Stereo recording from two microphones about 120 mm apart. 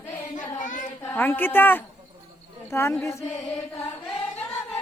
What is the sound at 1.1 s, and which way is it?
Speech, 15° left (ahead or behind).